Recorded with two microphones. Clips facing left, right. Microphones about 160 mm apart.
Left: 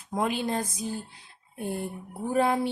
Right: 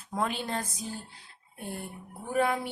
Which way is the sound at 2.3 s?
30° left (ahead or behind).